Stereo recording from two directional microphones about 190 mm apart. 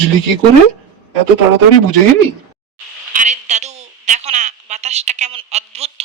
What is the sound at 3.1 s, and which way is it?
Telephone, 40° right (ahead or behind).